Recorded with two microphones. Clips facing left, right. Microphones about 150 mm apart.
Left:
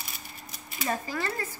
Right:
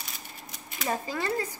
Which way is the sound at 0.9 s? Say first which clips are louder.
Right 2 dB; 20° right (ahead or behind).